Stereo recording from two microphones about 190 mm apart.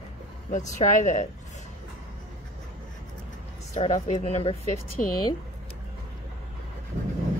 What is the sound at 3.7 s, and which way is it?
Speech, 35° left (ahead or behind).